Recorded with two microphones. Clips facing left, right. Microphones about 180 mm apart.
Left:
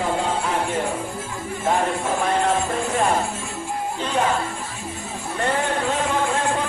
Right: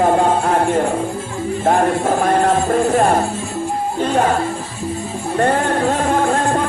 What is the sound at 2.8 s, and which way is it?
Music, 35° right (ahead or behind).